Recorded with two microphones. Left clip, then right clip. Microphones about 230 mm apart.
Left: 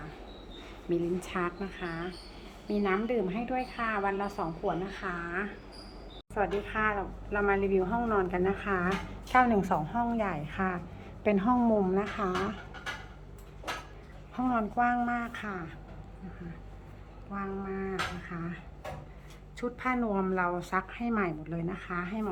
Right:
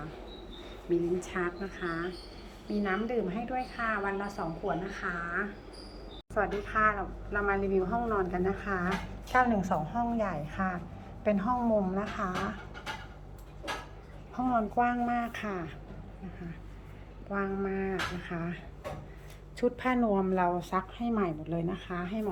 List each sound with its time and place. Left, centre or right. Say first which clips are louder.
0.9 s a woman's voice: right 1 dB; left
11.4 s speech: left 3 dB; left
11.9 s a woman's voice: left 2 dB; centre
14.5 s a woman's voice: even; centre
17.3 s a woman's voice: right 4 dB; centre